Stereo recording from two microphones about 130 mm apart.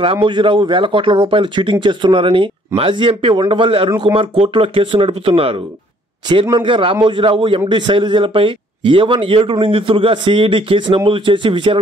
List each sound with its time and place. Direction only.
0.0 s a man's voice: 40° right (ahead or behind)